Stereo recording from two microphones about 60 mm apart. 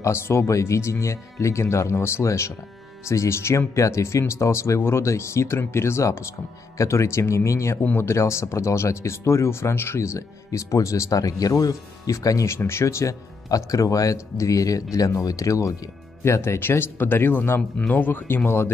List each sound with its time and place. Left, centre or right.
0.0 s speech: left
12.4 s speech: left
16.3 s speech: left